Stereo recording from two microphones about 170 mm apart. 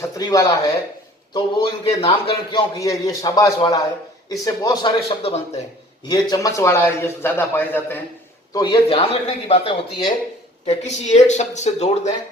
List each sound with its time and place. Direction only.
0.0 s a man's voice: 20° left (ahead or behind)
6.1 s a man's voice: 25° left (ahead or behind)
8.5 s speech: 25° left (ahead or behind)
10.7 s speech: 40° left (ahead or behind)